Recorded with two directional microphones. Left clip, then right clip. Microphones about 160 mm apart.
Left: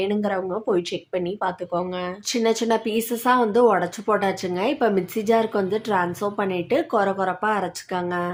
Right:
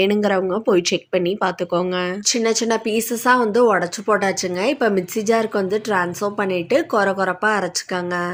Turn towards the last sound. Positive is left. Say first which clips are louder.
# right 4 dB
turn(degrees=-15)  # may be behind; listen again after turning